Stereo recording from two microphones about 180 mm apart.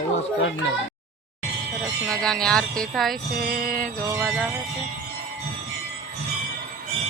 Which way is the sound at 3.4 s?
60° right (ahead or behind).